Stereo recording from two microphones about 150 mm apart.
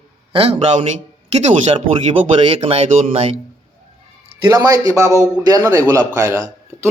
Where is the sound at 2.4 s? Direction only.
35° right (ahead or behind).